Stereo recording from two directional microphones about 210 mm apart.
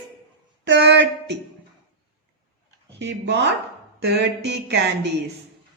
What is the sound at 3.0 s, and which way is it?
A woman's voice, 55° right (ahead or behind).